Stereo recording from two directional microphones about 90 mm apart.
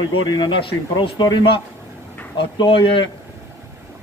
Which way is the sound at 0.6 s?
70° left (ahead or behind).